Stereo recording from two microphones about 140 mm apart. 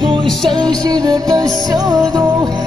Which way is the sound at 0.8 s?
25° right (ahead or behind).